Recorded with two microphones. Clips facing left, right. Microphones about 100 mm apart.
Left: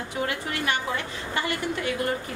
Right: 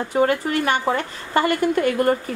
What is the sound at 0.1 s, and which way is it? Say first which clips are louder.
A woman's voice: right 11 dB; 45° right (ahead or behind).